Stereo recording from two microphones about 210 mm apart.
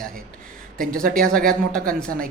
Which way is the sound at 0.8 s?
45° right (ahead or behind).